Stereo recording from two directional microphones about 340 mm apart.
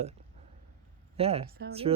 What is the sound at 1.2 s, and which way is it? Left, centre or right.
Speech, centre.